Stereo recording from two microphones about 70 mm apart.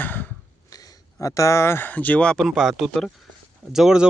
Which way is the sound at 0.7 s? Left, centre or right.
Left.